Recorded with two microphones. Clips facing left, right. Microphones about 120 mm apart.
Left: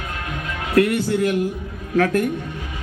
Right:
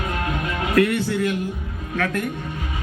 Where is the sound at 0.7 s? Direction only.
40° left (ahead or behind).